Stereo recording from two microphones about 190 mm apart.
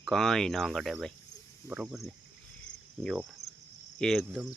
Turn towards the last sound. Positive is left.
turn(degrees=0)  # may be behind; listen again after turning